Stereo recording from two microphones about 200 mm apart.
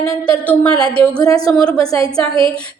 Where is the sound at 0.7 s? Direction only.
25° right (ahead or behind).